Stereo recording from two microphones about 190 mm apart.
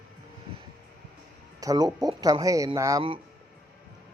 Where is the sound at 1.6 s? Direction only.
20° right (ahead or behind).